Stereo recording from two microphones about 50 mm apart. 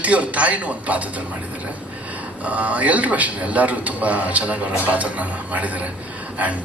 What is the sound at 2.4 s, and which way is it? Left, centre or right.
Speech, right.